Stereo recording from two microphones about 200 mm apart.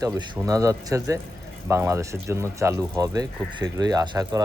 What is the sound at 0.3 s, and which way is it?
Speech, 15° right (ahead or behind).